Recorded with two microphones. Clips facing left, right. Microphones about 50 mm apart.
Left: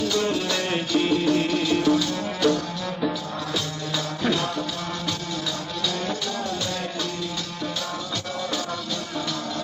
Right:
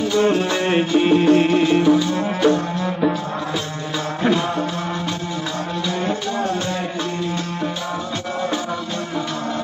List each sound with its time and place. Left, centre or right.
0.0 s music: right
4.2 s music: right
6.1 s music: right